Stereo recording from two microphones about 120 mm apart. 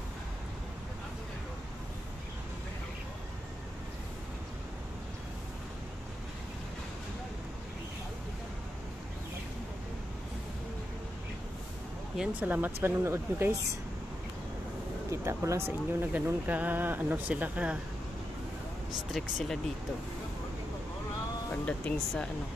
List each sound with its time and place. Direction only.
12.2 s speech: 15° right (ahead or behind)
15.0 s speech: 25° right (ahead or behind)
19.1 s speech: centre (ahead or behind)
21.6 s speech: 10° left (ahead or behind)